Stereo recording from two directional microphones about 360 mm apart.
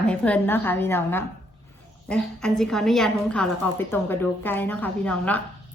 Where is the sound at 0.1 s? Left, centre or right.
Centre.